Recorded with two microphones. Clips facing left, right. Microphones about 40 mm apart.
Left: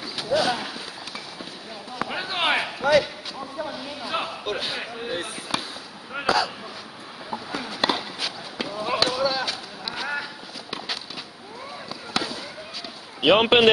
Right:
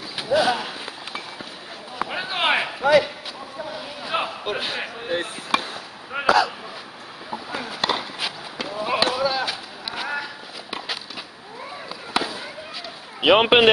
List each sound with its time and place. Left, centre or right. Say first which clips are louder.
0.2 s speech: right 3 dB; centre
2.0 s basketball bounce: right 2 dB; centre
3.3 s a sound: left 5 dB; centre
3.7 s a sound: right 6 dB; centre
5.1 s basketball bounce: right 7 dB; right
6.1 s a sound: right 4 dB; right
7.5 s chop: even; centre
12.1 s fireworks: right 3 dB; centre
13.2 s a man's voice: right 2 dB; centre